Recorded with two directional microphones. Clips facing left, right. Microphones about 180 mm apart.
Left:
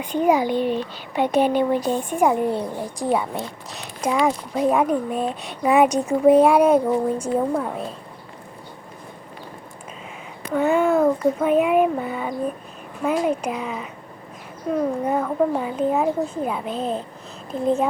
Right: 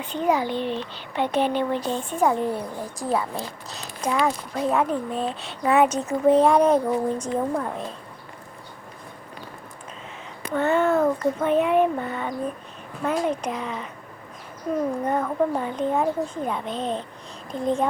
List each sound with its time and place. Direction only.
0.0 s speech: 10° left (ahead or behind)
2.5 s a woman's voice: 25° left (ahead or behind)
4.0 s speech: 15° left (ahead or behind)
10.5 s speech: 10° left (ahead or behind)
15.0 s speech: 5° left (ahead or behind)